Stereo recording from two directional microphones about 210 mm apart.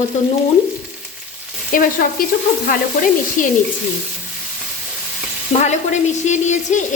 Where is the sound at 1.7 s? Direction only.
40° left (ahead or behind).